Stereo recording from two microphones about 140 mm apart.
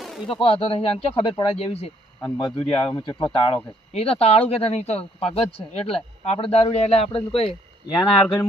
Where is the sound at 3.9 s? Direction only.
45° left (ahead or behind).